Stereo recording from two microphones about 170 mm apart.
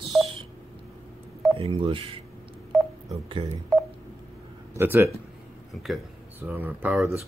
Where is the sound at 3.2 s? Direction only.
30° right (ahead or behind).